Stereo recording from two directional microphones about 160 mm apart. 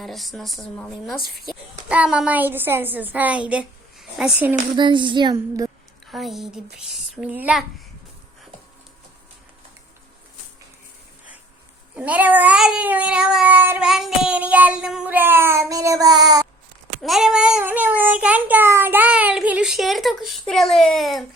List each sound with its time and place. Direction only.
0.0 s a woman's voice: centre (ahead or behind)
1.9 s cat: 5° right (ahead or behind)
4.8 s speech: 30° right (ahead or behind)
6.1 s a child's voice: centre (ahead or behind)
11.9 s cat: 10° right (ahead or behind)
17.0 s a child's voice: centre (ahead or behind)